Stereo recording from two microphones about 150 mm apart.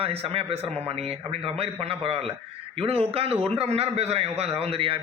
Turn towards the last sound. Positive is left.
turn(degrees=-40)  # may be behind; listen again after turning